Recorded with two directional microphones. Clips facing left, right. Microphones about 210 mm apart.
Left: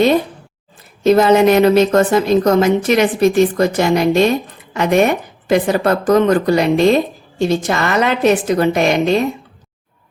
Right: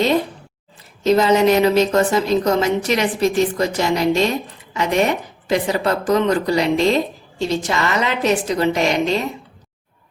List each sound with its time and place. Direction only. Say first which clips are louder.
1.0 s a woman's voice: left 4 dB; 55° left (ahead or behind)